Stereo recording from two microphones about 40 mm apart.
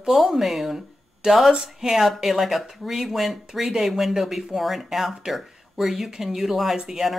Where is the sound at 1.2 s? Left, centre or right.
Centre.